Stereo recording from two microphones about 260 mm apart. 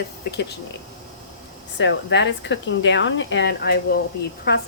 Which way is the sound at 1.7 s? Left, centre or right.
Left.